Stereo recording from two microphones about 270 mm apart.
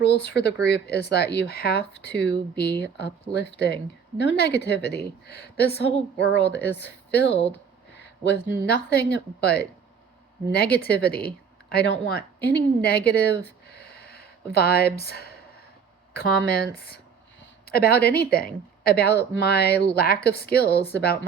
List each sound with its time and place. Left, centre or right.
0.0 s a woman's voice: left
7.3 s speech: left
8.2 s a woman's voice: left
13.7 s a sound: left
16.1 s a woman's voice: left